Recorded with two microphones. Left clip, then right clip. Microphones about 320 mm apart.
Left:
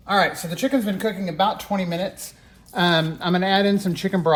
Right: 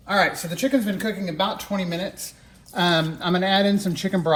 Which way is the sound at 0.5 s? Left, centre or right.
Left.